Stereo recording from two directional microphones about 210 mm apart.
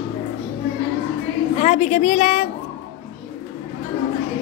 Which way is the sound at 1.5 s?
30° left (ahead or behind).